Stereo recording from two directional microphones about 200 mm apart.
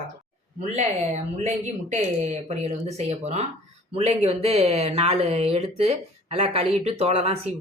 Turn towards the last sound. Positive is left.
turn(degrees=-30)  # may be behind; listen again after turning